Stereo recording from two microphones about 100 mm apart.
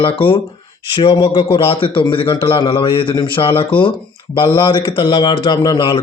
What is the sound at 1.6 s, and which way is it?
A man's voice, 60° left (ahead or behind).